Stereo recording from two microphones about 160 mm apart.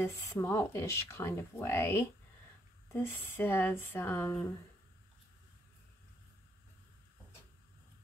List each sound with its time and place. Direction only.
0.0 s speech: 15° left (ahead or behind)